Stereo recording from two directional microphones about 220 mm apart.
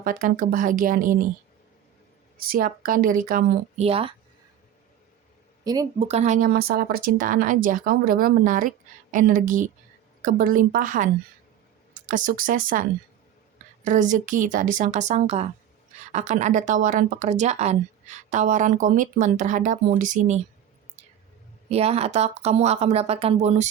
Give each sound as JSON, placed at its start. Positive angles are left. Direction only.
{"t": 0.0, "sound": "a woman's voice", "side_deg": -40}
{"t": 2.4, "sound": "a woman's voice", "side_deg": -40}
{"t": 3.8, "sound": "speech", "side_deg": -25}
{"t": 5.6, "sound": "speech", "side_deg": -15}
{"t": 6.1, "sound": "a woman's voice", "side_deg": -30}
{"t": 13.8, "sound": "a woman's voice", "side_deg": -35}
{"t": 21.7, "sound": "speech", "side_deg": -30}